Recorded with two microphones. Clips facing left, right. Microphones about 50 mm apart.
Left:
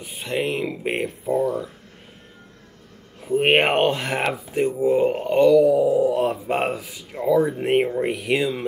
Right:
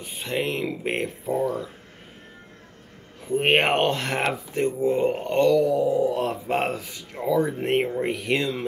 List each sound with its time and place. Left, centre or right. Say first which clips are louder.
0.0 s speech: left 2 dB; centre
3.2 s speech: left 3 dB; centre